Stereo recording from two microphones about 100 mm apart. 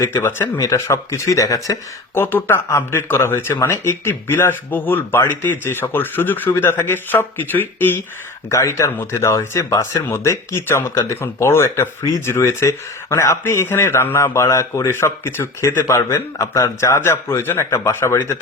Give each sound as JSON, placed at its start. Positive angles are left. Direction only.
{"t": 0.2, "sound": "speech", "side_deg": 20}
{"t": 2.2, "sound": "speech", "side_deg": 20}